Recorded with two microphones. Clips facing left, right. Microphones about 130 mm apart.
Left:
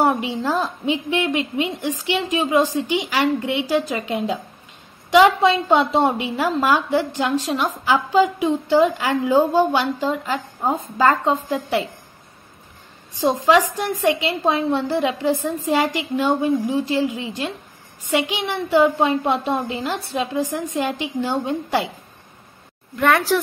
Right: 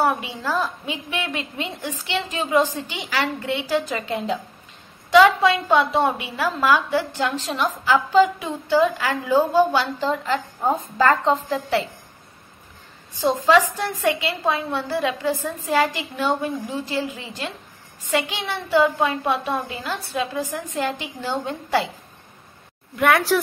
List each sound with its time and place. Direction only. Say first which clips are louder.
0.0 s a woman's voice: left 3 dB; 25° left (ahead or behind)
13.2 s a woman's voice: left 1 dB; 15° left (ahead or behind)
22.9 s a woman's voice: left 1 dB; 5° right (ahead or behind)